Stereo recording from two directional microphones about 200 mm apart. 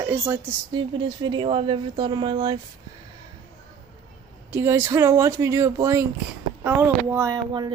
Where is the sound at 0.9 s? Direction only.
25° right (ahead or behind).